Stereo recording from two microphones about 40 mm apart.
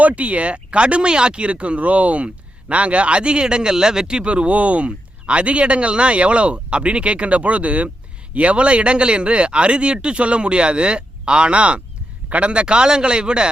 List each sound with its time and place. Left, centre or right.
0.0 s speech: right